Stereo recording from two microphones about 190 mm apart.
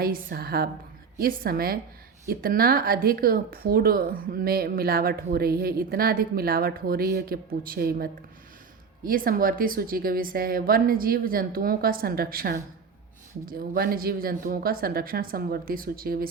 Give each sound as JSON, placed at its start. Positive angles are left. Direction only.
{"t": 0.0, "sound": "speech", "side_deg": -50}